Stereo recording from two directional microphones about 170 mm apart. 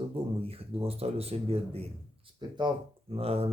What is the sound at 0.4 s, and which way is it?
Speech, 35° right (ahead or behind).